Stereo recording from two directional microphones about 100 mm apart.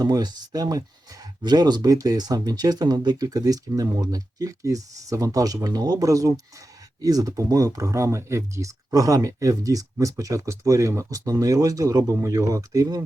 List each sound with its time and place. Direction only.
0.0 s speech: 40° right (ahead or behind)